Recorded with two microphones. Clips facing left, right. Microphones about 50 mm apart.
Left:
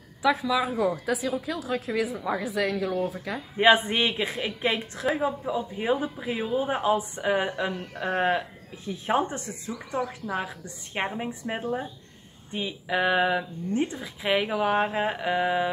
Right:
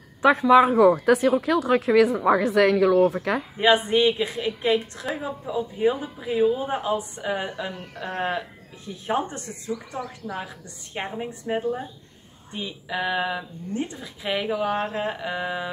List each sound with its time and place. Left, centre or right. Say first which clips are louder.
0.2 s speech: right 8 dB; right
2.1 s a woman's voice: right 9 dB; right
2.4 s speech: right 9 dB; right
2.9 s speech: right 9 dB; right
3.5 s speech: even; centre